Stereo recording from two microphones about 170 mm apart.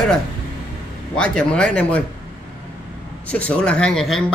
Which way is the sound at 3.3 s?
10° left (ahead or behind).